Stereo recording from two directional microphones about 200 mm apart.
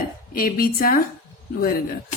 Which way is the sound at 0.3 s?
45° left (ahead or behind).